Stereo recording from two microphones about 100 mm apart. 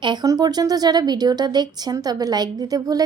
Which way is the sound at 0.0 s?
50° right (ahead or behind).